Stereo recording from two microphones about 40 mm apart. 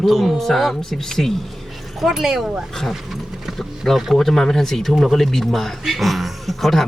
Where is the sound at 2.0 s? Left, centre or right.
Centre.